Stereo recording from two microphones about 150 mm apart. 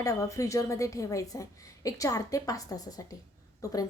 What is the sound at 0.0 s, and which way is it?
A woman's voice, 20° left (ahead or behind).